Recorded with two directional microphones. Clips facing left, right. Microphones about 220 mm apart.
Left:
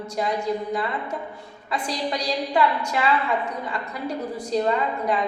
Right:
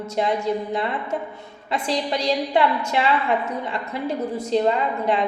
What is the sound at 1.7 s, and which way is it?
A woman's voice, 25° right (ahead or behind).